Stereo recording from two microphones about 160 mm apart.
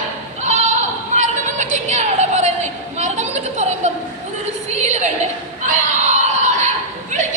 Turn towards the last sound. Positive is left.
turn(degrees=-50)  # may be behind; listen again after turning